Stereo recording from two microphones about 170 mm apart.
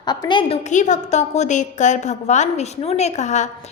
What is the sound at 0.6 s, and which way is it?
A woman's voice, 45° left (ahead or behind).